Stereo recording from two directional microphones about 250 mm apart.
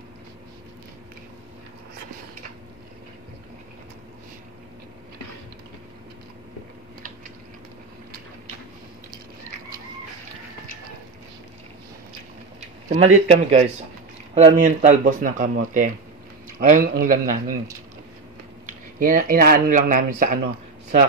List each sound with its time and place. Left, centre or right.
12.8 s a man's voice: right
18.7 s speech: right